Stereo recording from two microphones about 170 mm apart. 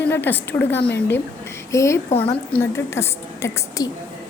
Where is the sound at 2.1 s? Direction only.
35° left (ahead or behind).